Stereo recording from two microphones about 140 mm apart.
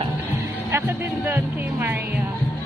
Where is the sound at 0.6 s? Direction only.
15° right (ahead or behind).